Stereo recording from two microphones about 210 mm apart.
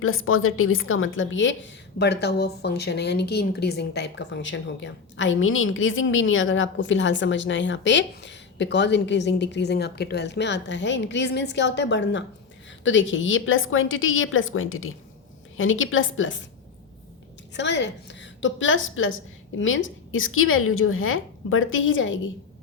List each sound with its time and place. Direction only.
0.0 s a woman's voice: 80° left
17.5 s a woman's voice: 55° left (ahead or behind)